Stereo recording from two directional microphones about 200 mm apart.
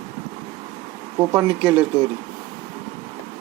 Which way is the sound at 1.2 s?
15° right (ahead or behind).